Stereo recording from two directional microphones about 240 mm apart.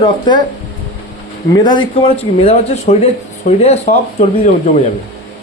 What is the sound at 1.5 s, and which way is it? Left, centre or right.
Speech, centre.